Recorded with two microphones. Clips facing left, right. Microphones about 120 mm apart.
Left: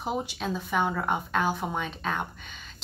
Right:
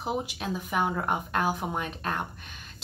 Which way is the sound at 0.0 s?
10° right (ahead or behind).